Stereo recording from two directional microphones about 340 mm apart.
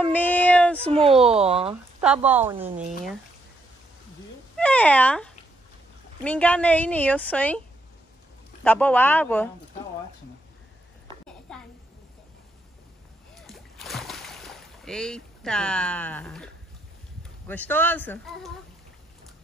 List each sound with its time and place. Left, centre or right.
0.0 s a sound: centre
0.9 s speech: centre
2.0 s a woman's voice: centre
4.6 s a woman's voice: centre
8.6 s a woman's voice: centre
11.5 s a sound: centre
13.4 s splash: centre
17.5 s a woman's voice: centre